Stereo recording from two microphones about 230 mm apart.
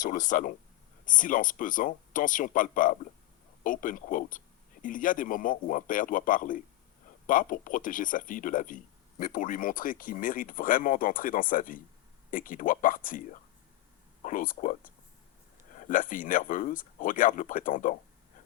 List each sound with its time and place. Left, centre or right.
0.0 s speech: left